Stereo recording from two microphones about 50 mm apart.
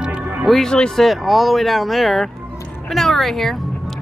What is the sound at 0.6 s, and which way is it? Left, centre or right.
Speech, centre.